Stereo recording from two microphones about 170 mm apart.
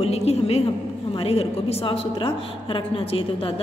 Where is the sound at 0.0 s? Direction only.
40° left (ahead or behind).